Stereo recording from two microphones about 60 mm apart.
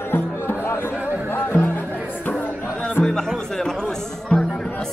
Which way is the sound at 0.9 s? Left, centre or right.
Right.